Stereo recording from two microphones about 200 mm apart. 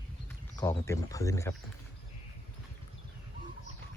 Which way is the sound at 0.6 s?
15° left (ahead or behind).